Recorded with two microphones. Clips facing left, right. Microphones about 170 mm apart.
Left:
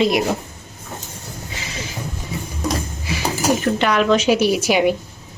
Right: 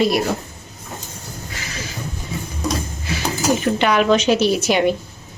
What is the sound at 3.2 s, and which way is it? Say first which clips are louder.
A woman's voice: even; centre (ahead or behind).